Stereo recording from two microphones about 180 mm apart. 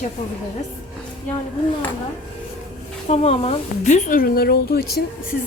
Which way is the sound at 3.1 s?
35° left (ahead or behind).